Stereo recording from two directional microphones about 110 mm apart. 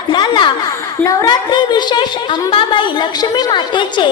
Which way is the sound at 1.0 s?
30° left (ahead or behind).